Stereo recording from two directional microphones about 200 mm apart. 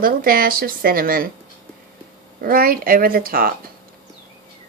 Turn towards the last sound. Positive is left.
turn(degrees=-45)  # may be behind; listen again after turning